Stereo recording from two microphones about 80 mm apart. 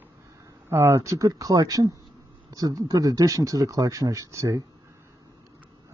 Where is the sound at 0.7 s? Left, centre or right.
Right.